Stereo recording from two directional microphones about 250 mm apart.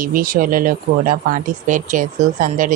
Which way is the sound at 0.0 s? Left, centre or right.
Right.